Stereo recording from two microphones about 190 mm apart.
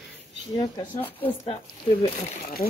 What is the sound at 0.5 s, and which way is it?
Speech, 20° left (ahead or behind).